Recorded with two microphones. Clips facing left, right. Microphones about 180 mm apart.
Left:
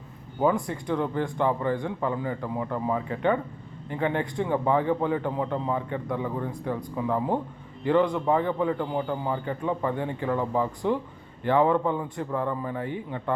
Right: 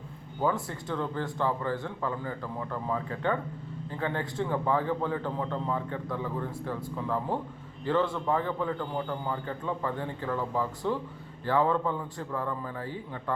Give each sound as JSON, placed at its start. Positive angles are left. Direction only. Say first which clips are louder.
{"t": 0.7, "sound": "a man's voice", "louder": "left 5 dB", "side_deg": 15}